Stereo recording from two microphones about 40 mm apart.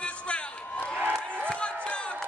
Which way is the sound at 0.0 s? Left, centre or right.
Left.